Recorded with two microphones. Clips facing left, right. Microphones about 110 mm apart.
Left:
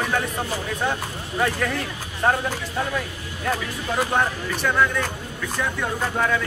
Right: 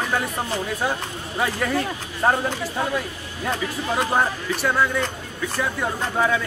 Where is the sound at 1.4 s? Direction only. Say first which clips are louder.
Right 1 dB; 5° right (ahead or behind).